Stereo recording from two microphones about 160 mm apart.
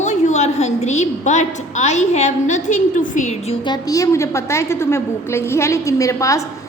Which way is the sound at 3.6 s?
25° left (ahead or behind).